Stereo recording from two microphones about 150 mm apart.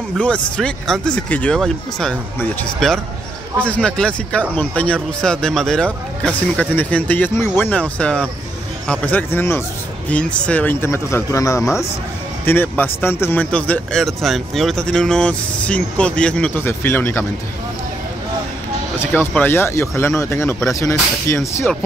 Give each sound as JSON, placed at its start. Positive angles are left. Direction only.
{"t": 0.2, "sound": "speech", "side_deg": 5}
{"t": 18.9, "sound": "speech", "side_deg": 15}